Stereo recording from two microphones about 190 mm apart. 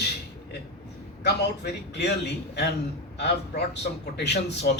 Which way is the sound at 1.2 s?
60° left (ahead or behind).